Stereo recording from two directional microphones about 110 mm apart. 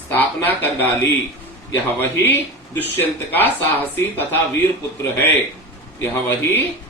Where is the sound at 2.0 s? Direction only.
20° left (ahead or behind).